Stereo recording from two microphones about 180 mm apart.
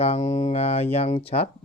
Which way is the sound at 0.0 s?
40° left (ahead or behind).